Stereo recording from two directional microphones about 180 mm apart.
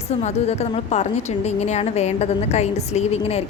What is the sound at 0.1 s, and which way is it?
Speech, 35° left (ahead or behind).